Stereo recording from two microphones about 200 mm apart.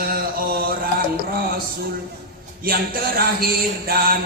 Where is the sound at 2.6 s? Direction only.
50° right (ahead or behind).